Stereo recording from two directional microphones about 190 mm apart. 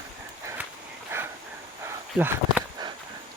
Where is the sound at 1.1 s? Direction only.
10° right (ahead or behind).